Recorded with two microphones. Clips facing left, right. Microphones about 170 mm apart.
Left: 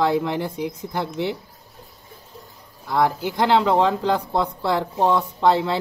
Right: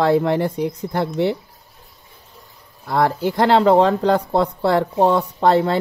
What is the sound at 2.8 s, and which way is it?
A man's voice, 55° right (ahead or behind).